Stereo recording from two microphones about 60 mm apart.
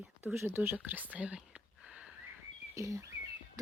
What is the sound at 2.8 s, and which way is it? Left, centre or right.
Speech, right.